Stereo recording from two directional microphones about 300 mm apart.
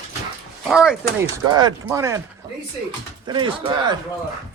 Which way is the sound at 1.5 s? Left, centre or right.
Centre.